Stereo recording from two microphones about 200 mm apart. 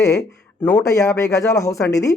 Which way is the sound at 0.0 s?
15° left (ahead or behind).